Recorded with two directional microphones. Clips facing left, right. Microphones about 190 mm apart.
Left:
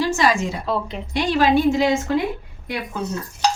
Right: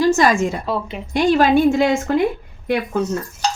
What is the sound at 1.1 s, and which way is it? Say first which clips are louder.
A woman's voice: right 3 dB; 45° right (ahead or behind).